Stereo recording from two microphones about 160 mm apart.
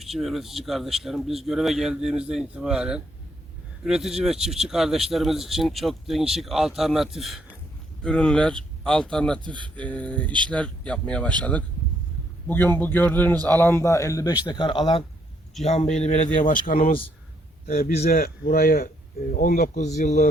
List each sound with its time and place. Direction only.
0.0 s a man's voice: centre (ahead or behind); by 15.0 s 30° left (ahead or behind)
15.6 s speech: 45° left (ahead or behind)